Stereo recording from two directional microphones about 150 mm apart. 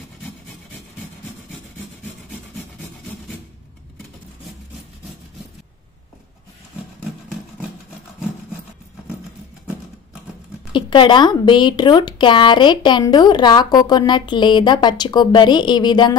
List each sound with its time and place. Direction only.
10.7 s speech: 30° left (ahead or behind)